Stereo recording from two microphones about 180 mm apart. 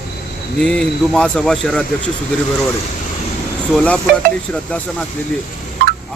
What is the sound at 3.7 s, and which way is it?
A man's voice, 5° left (ahead or behind).